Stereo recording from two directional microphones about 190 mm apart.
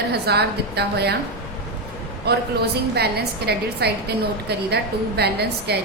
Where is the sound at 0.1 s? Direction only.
60° right (ahead or behind).